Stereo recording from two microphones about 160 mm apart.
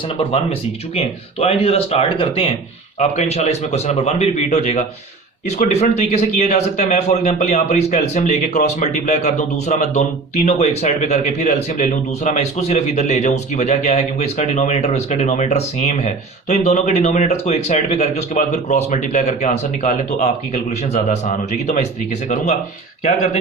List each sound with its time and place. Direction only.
0.2 s a man's voice: 35° left (ahead or behind)